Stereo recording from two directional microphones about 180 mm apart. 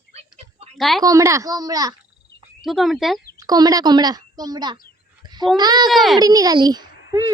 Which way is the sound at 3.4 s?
20° right (ahead or behind).